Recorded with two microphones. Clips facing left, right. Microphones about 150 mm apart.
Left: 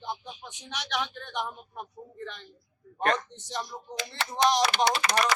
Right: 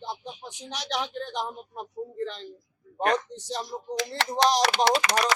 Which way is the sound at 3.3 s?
35° right (ahead or behind).